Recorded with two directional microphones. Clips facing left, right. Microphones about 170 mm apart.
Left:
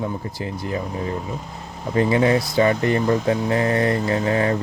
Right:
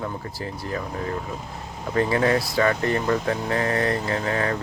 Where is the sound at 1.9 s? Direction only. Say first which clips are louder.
Left 3 dB; 25° left (ahead or behind).